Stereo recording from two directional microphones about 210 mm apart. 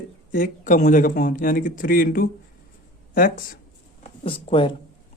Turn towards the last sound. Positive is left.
turn(degrees=25)  # may be behind; listen again after turning